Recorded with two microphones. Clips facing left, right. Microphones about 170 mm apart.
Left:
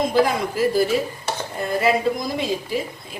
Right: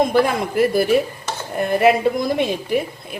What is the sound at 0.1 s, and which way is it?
A woman's voice, 60° right (ahead or behind).